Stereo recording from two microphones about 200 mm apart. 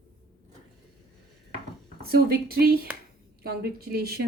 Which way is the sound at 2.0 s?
50° right (ahead or behind).